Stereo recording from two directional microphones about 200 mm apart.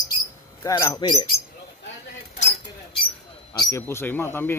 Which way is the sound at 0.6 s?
20° left (ahead or behind).